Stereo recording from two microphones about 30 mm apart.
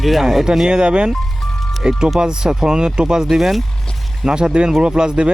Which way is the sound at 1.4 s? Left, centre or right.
Centre.